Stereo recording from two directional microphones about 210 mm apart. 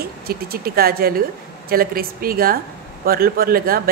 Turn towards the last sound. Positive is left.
turn(degrees=-45)  # may be behind; listen again after turning